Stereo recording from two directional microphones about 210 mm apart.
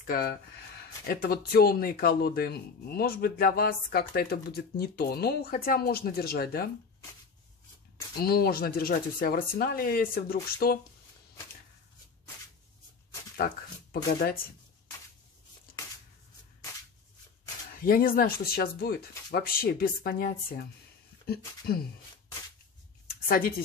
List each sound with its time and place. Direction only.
0.0 s speech: 45° left (ahead or behind)
8.2 s speech: 45° left (ahead or behind)
17.8 s speech: 40° left (ahead or behind)
23.2 s speech: 45° left (ahead or behind)